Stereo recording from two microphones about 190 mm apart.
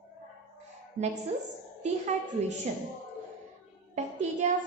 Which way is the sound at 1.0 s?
35° right (ahead or behind).